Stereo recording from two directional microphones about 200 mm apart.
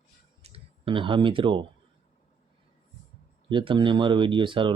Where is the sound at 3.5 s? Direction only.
25° right (ahead or behind).